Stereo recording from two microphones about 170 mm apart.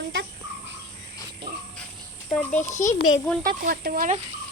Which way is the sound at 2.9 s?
20° left (ahead or behind).